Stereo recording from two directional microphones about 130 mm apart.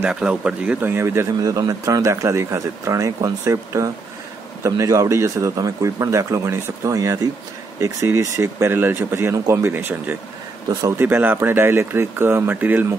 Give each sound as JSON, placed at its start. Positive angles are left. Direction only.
{"t": 0.0, "sound": "a man's voice", "side_deg": -5}